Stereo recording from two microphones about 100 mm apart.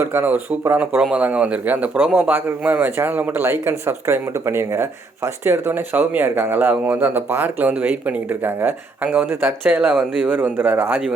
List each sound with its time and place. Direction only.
0.0 s speech: 25° right (ahead or behind)